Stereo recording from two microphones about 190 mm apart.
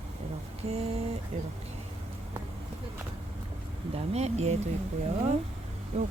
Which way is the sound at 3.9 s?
35° right (ahead or behind).